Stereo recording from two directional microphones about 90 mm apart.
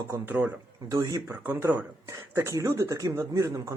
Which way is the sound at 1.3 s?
25° right (ahead or behind).